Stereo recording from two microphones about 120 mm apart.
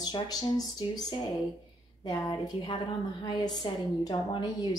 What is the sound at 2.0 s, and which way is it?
Speech, 25° left (ahead or behind).